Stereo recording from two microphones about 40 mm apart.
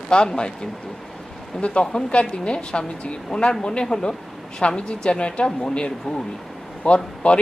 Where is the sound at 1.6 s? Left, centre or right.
Left.